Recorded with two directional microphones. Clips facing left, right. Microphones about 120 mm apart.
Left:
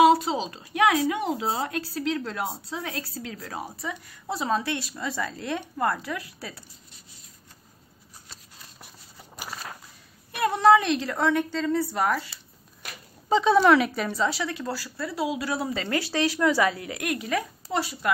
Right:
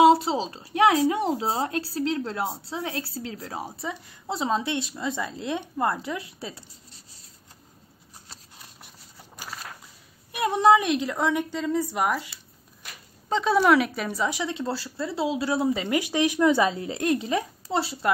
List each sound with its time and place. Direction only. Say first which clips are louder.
0.0 s speech: right 1 dB; 30° right (ahead or behind)
10.3 s a woman's voice: even; 15° right (ahead or behind)
13.3 s speech: left 2 dB; centre (ahead or behind); by 18.1 s 30° right (ahead or behind)